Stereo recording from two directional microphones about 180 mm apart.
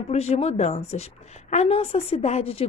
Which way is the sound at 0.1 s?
35° left (ahead or behind).